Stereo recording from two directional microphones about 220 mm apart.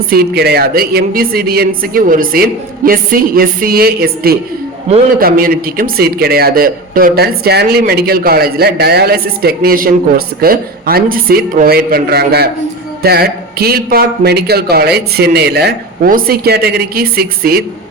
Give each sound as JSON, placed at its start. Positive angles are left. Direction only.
{"t": 0.1, "sound": "a man's voice", "side_deg": -45}